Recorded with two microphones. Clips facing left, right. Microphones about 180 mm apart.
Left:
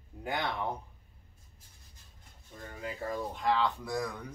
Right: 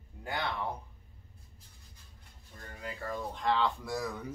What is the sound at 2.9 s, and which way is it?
Speech, 10° left (ahead or behind).